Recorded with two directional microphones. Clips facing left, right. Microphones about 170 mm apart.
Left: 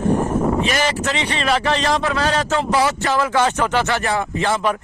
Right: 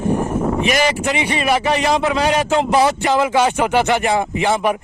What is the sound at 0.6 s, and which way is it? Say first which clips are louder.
A man's voice: right 3 dB; 15° right (ahead or behind).